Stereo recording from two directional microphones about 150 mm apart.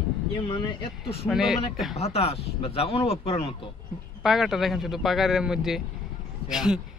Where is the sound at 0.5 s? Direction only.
30° left (ahead or behind).